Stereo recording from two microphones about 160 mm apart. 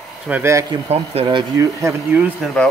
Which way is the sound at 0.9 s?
40° right (ahead or behind).